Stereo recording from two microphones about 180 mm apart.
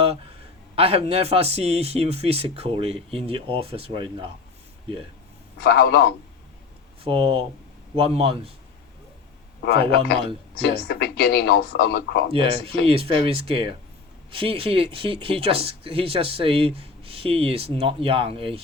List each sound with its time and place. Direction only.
0.8 s speech: 35° right (ahead or behind)
5.5 s speech: 60° left (ahead or behind)
7.0 s speech: 30° right (ahead or behind)
9.6 s speech: 60° left (ahead or behind)
12.3 s speech: 30° right (ahead or behind)